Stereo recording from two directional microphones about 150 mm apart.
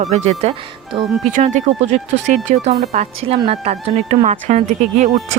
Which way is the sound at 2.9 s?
45° right (ahead or behind).